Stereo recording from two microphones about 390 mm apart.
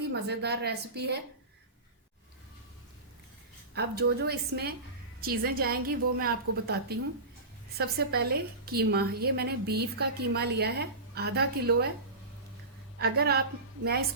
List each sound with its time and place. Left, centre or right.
0.0 s a woman's voice: right
3.8 s a woman's voice: right
13.0 s a woman's voice: right